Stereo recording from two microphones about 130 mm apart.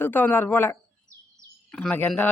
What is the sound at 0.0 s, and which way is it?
A man's voice, 15° left (ahead or behind).